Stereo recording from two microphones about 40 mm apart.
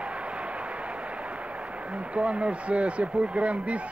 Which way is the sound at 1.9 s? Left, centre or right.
Right.